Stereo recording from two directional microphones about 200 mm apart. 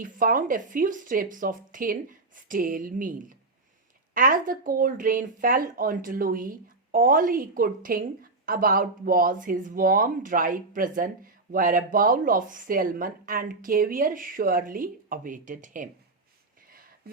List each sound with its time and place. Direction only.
0.0 s speech: 45° right (ahead or behind)